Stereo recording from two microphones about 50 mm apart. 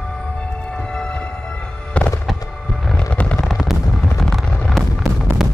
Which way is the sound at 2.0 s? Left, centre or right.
Left.